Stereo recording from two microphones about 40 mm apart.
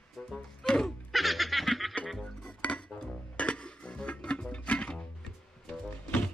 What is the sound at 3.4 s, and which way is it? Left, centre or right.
Music, left.